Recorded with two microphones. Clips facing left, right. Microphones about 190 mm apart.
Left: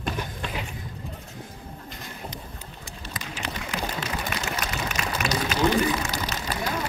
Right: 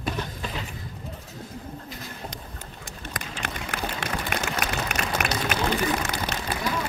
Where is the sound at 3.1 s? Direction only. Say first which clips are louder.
Left 1 dB; 50° right (ahead or behind).